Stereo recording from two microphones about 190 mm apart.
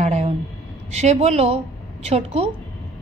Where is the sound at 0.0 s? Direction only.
35° right (ahead or behind).